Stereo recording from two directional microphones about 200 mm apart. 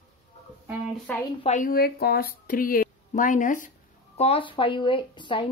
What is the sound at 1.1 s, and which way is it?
Speech, 10° left (ahead or behind).